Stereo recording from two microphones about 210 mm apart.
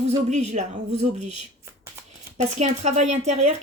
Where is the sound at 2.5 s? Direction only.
35° right (ahead or behind).